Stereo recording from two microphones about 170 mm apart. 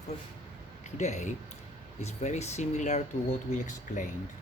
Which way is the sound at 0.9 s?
45° left (ahead or behind).